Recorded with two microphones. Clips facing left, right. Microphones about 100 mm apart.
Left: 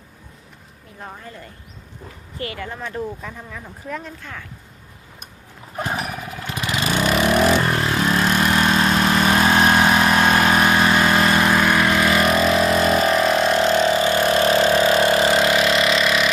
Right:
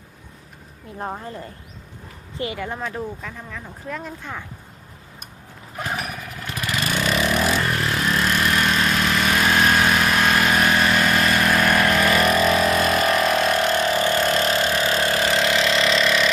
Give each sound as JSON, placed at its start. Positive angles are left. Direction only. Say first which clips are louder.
{"t": 0.9, "sound": "speech", "louder": "right 6 dB", "side_deg": -35}
{"t": 2.4, "sound": "speech", "louder": "right 2 dB", "side_deg": -20}
{"t": 3.2, "sound": "speech", "louder": "even", "side_deg": 10}
{"t": 4.2, "sound": "speech", "louder": "right 3 dB", "side_deg": -20}
{"t": 6.4, "sound": "vehicle", "louder": "left 2 dB", "side_deg": 20}
{"t": 11.6, "sound": "vehicle", "louder": "left 1 dB", "side_deg": 15}
{"t": 15.8, "sound": "vehicle", "louder": "left 1 dB", "side_deg": 5}